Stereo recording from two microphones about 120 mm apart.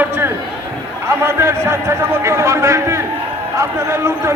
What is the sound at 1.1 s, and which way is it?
A man's voice, 20° right (ahead or behind).